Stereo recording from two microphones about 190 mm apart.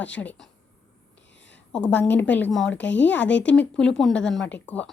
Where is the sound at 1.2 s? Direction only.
70° left (ahead or behind).